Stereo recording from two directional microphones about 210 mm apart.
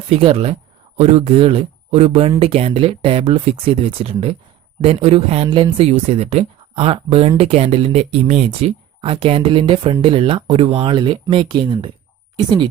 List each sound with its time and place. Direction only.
0.1 s speech: 25° right (ahead or behind)